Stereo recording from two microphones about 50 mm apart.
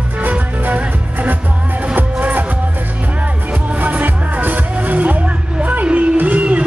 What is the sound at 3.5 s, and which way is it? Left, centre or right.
Music, right.